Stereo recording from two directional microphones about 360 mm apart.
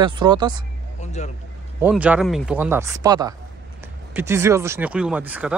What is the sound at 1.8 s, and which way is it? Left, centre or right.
Speech, centre.